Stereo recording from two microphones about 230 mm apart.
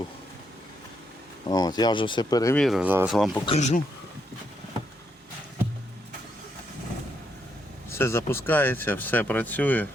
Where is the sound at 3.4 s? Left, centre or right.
Left.